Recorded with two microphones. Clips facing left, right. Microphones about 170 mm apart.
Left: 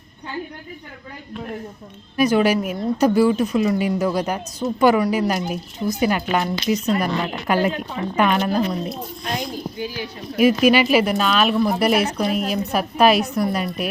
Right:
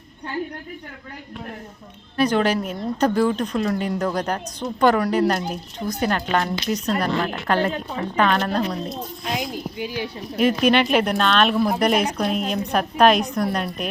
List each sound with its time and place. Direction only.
2.1 s a woman's voice: 10° left (ahead or behind)
9.7 s speech: 25° right (ahead or behind)
10.3 s speech: 5° left (ahead or behind)